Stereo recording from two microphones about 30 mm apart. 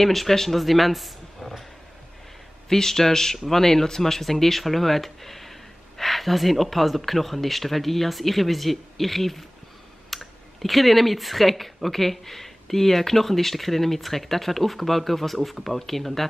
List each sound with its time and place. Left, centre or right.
0.0 s speech: centre
2.7 s speech: centre